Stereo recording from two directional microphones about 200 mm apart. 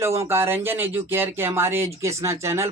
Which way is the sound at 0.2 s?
10° right (ahead or behind).